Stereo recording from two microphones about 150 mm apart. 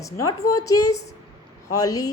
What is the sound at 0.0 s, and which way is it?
Speech, 20° left (ahead or behind).